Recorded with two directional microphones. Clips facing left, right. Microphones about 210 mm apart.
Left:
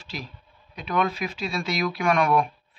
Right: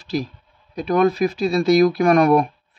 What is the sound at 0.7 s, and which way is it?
A man's voice, 40° right (ahead or behind).